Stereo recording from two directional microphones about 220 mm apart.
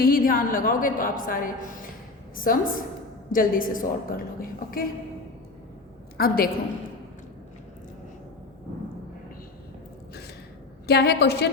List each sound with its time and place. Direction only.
0.0 s a woman's voice: 40° left (ahead or behind)
6.1 s a woman's voice: 45° left (ahead or behind)
10.8 s a woman's voice: 50° left (ahead or behind)